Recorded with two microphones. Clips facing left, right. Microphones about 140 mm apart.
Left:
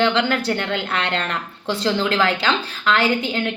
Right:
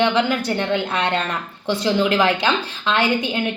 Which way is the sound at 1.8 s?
15° right (ahead or behind).